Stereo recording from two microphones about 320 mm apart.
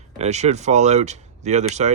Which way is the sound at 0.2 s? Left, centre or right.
Right.